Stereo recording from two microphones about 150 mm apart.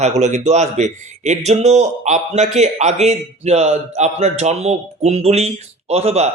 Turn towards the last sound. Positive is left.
turn(degrees=-45)  # may be behind; listen again after turning